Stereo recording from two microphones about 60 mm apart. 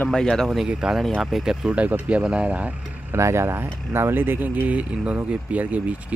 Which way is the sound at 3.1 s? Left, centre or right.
Right.